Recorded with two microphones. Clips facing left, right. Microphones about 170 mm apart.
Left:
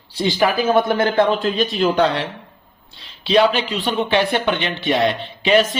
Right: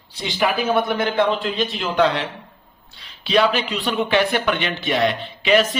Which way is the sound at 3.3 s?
30° left (ahead or behind).